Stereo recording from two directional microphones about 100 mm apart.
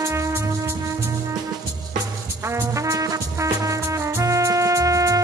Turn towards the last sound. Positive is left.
turn(degrees=-35)  # may be behind; listen again after turning